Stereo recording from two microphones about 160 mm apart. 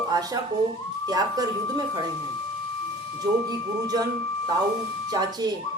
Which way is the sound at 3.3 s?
25° right (ahead or behind).